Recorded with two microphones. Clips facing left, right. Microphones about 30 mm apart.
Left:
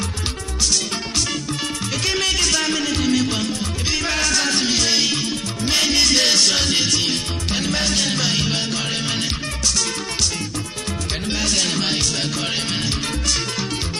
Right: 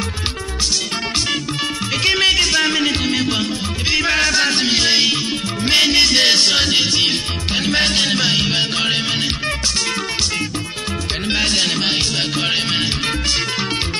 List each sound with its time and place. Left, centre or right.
2.0 s music: right
11.2 s music: right